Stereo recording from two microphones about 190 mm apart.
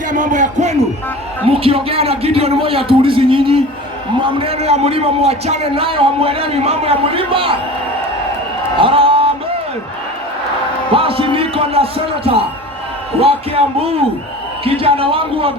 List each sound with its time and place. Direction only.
0.1 s a man's voice: 40° right (ahead or behind)
8.8 s a sound: 30° right (ahead or behind)
10.9 s a man's voice: 30° right (ahead or behind)